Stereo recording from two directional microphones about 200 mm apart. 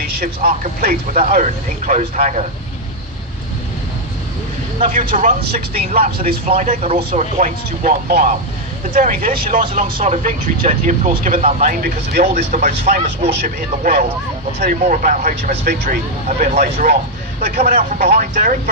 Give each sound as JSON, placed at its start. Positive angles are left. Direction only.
{"t": 0.0, "sound": "speech", "side_deg": -50}
{"t": 1.9, "sound": "speech", "side_deg": -35}
{"t": 4.8, "sound": "speech", "side_deg": -40}
{"t": 6.5, "sound": "speech", "side_deg": -30}
{"t": 12.2, "sound": "speech", "side_deg": -35}